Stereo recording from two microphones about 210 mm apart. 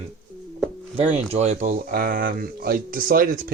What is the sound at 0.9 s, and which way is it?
Speech, 30° right (ahead or behind).